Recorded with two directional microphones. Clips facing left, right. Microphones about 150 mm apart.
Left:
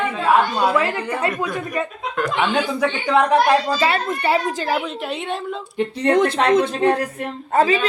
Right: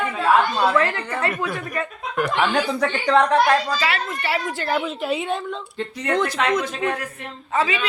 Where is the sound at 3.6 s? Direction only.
30° left (ahead or behind).